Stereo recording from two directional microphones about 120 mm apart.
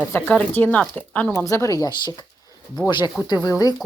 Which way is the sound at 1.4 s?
25° left (ahead or behind).